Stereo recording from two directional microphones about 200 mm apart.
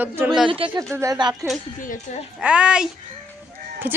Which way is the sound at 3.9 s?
10° right (ahead or behind).